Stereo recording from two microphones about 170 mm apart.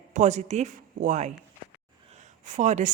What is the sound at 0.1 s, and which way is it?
A woman's voice, 45° right (ahead or behind).